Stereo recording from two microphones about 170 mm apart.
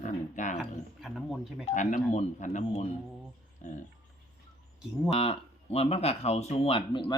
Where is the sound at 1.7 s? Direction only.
45° left (ahead or behind).